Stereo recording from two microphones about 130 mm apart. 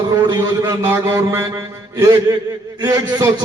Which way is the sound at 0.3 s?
35° right (ahead or behind).